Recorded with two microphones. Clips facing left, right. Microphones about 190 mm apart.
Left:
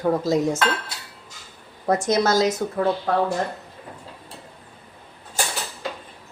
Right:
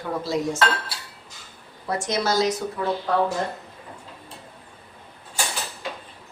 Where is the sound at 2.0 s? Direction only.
45° left (ahead or behind).